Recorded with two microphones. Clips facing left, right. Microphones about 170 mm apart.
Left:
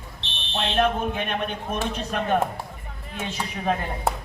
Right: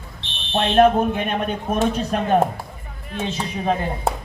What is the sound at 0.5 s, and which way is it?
A man's voice, 55° right (ahead or behind).